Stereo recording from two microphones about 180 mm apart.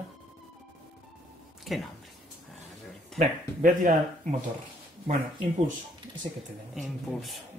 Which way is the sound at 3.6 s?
45° right (ahead or behind).